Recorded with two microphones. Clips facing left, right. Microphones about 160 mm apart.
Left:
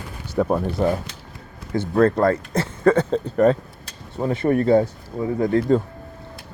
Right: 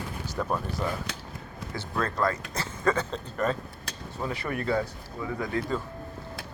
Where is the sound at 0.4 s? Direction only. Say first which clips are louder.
Left 10 dB; 55° left (ahead or behind).